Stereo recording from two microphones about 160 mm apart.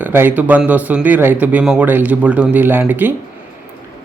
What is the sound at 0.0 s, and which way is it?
A man's voice, 10° right (ahead or behind).